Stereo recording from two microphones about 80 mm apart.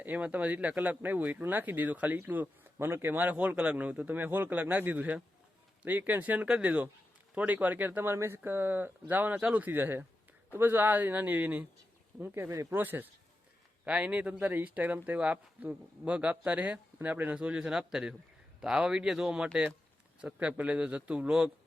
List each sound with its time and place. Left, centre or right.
0.0 s speech: right